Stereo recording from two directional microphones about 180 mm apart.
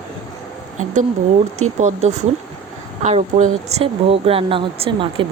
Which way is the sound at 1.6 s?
40° right (ahead or behind).